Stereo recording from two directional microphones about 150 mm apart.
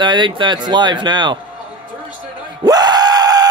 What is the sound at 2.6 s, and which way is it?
Screaming, 25° right (ahead or behind).